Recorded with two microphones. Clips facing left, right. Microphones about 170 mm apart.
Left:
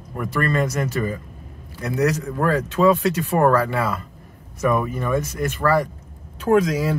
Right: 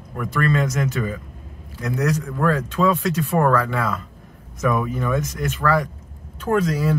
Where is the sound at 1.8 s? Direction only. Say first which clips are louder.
Left 2 dB; 5° left (ahead or behind).